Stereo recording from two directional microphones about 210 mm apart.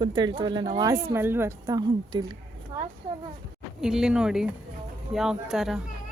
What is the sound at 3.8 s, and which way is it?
Speech, 5° right (ahead or behind).